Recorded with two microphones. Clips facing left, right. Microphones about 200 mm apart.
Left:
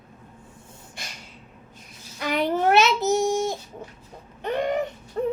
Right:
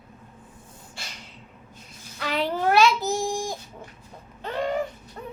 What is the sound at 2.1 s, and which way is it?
A child's voice, 15° left (ahead or behind).